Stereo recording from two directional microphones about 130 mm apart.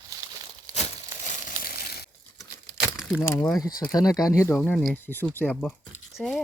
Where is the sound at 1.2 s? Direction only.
70° left (ahead or behind).